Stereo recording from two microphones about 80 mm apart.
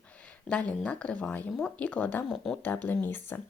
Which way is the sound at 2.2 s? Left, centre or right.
Centre.